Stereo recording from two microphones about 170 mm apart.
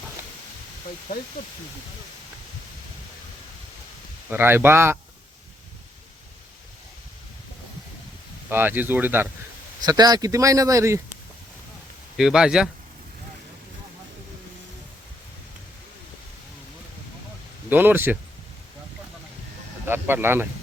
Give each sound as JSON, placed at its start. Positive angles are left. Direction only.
{"t": 4.3, "sound": "speech", "side_deg": -10}
{"t": 8.4, "sound": "speech", "side_deg": -10}
{"t": 9.8, "sound": "speech", "side_deg": -25}
{"t": 12.1, "sound": "speech", "side_deg": -5}
{"t": 17.7, "sound": "speech", "side_deg": -10}
{"t": 19.8, "sound": "speech", "side_deg": -10}